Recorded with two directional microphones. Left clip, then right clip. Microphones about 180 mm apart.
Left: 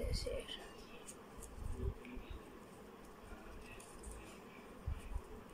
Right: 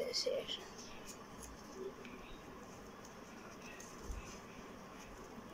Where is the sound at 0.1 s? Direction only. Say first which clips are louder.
Right 6 dB; centre (ahead or behind).